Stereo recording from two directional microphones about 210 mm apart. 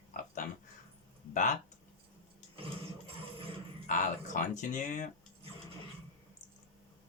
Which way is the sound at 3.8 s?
35° left (ahead or behind).